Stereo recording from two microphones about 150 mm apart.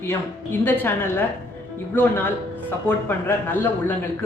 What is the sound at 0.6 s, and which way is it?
Speech, 15° left (ahead or behind).